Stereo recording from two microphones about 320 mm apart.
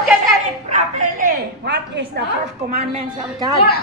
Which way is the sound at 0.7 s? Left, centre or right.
Right.